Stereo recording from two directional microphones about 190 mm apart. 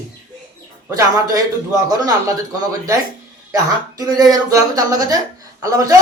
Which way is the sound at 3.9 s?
20° right (ahead or behind).